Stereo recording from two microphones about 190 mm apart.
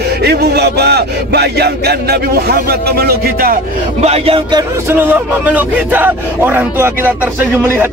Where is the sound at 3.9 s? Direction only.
35° right (ahead or behind).